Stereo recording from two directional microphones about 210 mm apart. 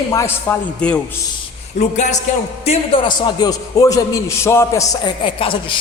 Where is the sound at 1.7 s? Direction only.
35° left (ahead or behind).